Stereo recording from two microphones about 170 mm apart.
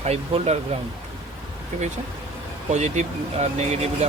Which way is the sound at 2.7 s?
40° right (ahead or behind).